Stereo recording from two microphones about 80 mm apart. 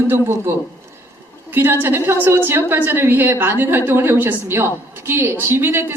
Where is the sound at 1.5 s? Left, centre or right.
Right.